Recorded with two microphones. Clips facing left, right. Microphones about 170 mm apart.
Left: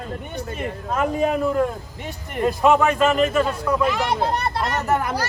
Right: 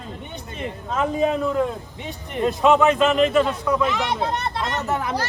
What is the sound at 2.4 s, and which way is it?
A man's voice, centre (ahead or behind).